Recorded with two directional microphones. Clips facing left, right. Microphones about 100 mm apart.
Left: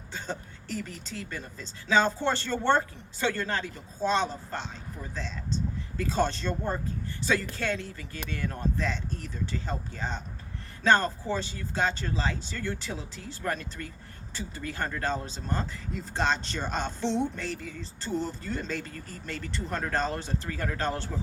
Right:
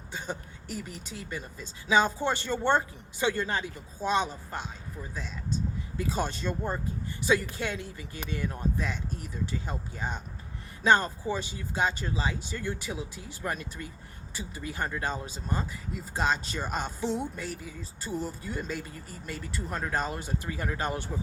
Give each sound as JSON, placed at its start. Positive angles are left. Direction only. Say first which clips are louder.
{"t": 0.1, "sound": "speech", "louder": "even", "side_deg": -15}